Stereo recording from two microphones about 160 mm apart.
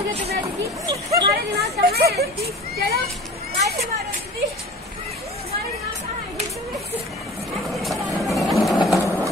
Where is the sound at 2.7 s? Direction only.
75° right (ahead or behind).